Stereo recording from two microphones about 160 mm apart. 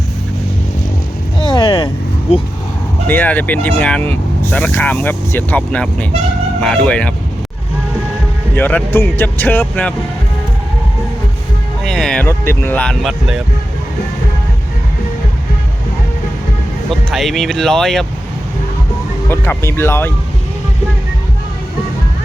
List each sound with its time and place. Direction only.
1.4 s vehicle: 30° left (ahead or behind)
3.1 s speech: 10° left (ahead or behind)
8.5 s speech: 10° left (ahead or behind)
11.9 s music: 5° left (ahead or behind)
12.3 s speech: 15° left (ahead or behind); by 13.4 s centre (ahead or behind)
16.9 s speech: centre (ahead or behind)
19.3 s speech: 15° left (ahead or behind)